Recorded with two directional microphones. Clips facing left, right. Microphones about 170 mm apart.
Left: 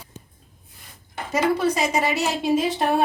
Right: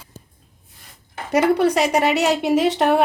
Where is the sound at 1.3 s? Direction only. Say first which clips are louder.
Right 5 dB; 65° right (ahead or behind).